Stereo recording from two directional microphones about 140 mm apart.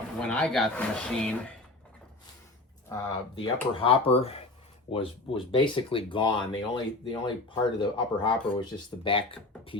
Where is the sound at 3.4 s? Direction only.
40° left (ahead or behind).